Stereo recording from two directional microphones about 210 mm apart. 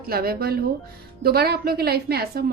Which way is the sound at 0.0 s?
45° right (ahead or behind).